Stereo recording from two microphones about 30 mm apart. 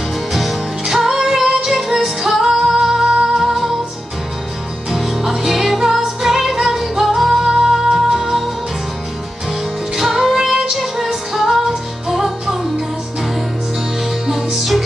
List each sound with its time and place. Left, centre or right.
0.3 s music: centre
1.4 s music: centre
1.7 s music: centre
2.4 s music: centre
4.9 s music: centre
10.1 s music: centre
14.2 s music: centre